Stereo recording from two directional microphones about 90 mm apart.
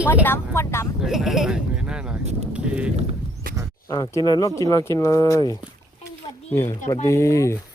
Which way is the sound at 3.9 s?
40° left (ahead or behind).